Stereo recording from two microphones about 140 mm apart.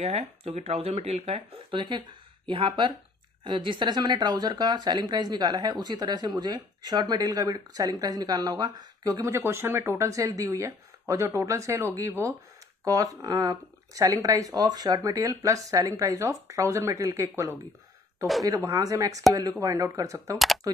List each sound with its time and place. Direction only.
0.0 s speech: 45° right (ahead or behind); by 20.3 s 25° right (ahead or behind)